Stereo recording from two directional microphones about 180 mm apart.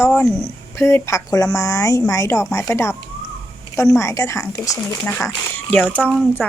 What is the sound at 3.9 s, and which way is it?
A woman's voice, 15° left (ahead or behind).